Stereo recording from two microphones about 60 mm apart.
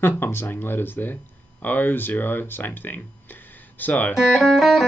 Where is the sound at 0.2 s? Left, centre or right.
Left.